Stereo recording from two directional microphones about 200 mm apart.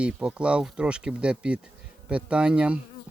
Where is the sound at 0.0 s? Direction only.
5° right (ahead or behind).